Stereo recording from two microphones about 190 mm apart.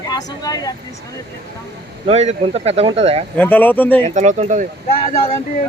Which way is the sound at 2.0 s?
35° right (ahead or behind).